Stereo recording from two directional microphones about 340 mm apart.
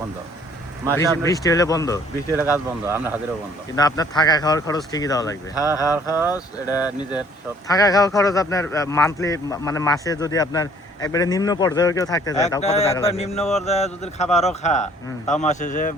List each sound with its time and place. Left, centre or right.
0.9 s speech: centre
2.8 s speech: centre
3.8 s speech: centre
13.4 s speech: centre
13.7 s speech: centre